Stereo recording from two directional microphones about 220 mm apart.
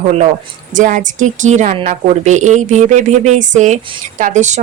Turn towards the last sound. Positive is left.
turn(degrees=-35)  # may be behind; listen again after turning